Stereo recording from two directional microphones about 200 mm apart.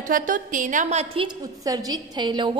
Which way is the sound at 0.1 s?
40° right (ahead or behind).